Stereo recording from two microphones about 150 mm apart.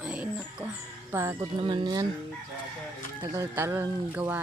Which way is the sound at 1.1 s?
15° right (ahead or behind).